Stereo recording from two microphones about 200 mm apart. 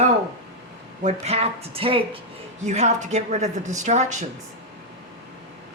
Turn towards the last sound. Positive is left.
turn(degrees=-35)  # may be behind; listen again after turning